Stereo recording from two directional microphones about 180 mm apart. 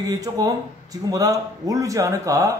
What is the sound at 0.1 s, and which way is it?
A man's voice, 20° right (ahead or behind).